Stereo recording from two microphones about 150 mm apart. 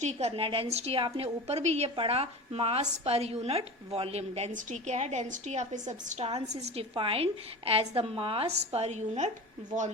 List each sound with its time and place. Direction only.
0.0 s a woman's voice: 45° right (ahead or behind)